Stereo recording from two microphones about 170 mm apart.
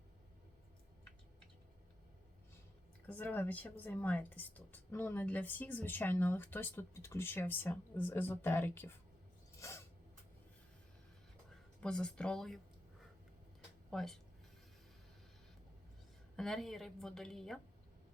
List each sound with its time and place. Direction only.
3.1 s speech: 10° left (ahead or behind)
9.6 s a sound: 15° left (ahead or behind)
11.8 s a woman's voice: 5° left (ahead or behind)
13.9 s a woman's voice: centre (ahead or behind)
16.3 s a woman's voice: centre (ahead or behind)